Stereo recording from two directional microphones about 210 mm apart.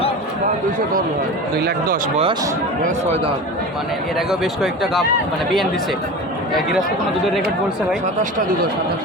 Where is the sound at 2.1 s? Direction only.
25° right (ahead or behind).